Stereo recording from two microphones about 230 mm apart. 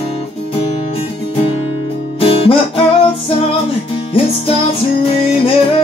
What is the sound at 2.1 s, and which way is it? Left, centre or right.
Guitar, left.